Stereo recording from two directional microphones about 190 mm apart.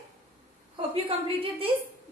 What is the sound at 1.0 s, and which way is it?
Speech, 30° right (ahead or behind).